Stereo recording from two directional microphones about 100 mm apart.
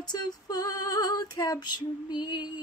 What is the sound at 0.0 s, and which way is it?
Female singing, 45° left (ahead or behind).